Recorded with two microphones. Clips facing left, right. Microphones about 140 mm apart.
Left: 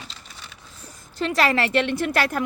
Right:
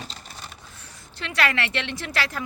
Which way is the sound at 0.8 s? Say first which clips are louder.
Left 10 dB; 45° left (ahead or behind).